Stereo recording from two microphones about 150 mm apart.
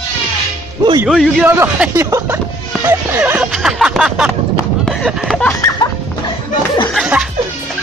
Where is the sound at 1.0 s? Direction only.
5° right (ahead or behind).